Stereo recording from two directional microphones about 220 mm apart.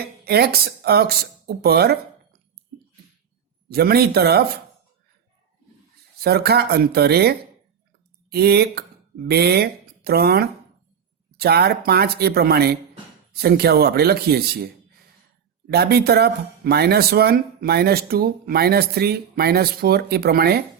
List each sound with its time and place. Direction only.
0.0 s speech: 45° right (ahead or behind)
3.7 s speech: 45° right (ahead or behind)
6.1 s speech: 45° right (ahead or behind)